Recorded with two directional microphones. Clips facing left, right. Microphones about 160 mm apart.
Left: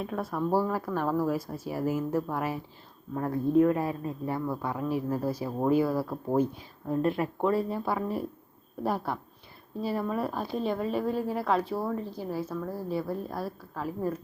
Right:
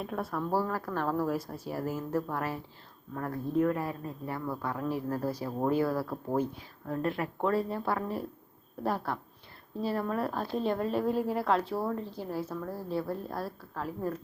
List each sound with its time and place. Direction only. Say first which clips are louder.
0.0 s speech: left 2 dB; centre (ahead or behind)
0.3 s a woman's voice: left 4 dB; 15° left (ahead or behind)